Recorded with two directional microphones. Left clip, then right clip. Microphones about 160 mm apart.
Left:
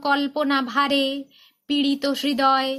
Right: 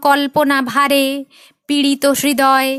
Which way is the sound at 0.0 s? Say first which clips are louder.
Right 9 dB; 50° right (ahead or behind).